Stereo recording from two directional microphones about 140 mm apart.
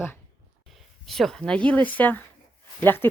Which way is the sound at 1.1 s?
5° left (ahead or behind).